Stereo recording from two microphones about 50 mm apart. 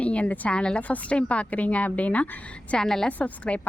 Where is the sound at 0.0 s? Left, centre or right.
Left.